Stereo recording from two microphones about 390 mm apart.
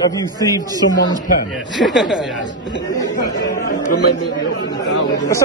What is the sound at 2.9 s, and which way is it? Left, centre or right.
Speech, centre.